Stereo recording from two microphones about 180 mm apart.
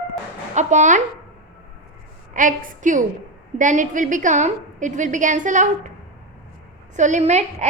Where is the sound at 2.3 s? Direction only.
45° right (ahead or behind).